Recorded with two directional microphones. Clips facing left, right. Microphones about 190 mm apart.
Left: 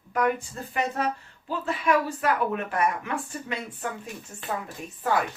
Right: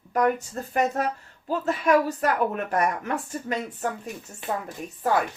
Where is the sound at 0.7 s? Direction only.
45° right (ahead or behind).